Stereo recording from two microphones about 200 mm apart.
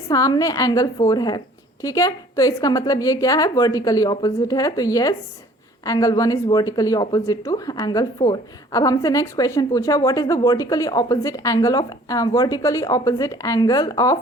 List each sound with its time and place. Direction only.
0.1 s speech: 20° left (ahead or behind)